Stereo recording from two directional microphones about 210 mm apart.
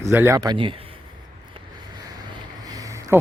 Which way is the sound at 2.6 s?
15° right (ahead or behind).